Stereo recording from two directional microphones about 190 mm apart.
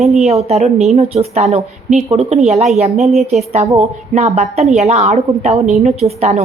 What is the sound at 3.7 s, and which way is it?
A woman's voice, 35° right (ahead or behind).